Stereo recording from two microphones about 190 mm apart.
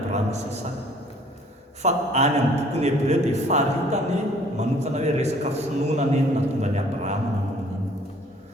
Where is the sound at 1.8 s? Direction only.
35° right (ahead or behind).